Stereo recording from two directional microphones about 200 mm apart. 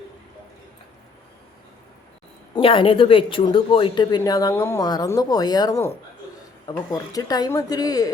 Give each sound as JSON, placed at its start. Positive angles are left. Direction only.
{"t": 2.6, "sound": "a woman's voice", "side_deg": 25}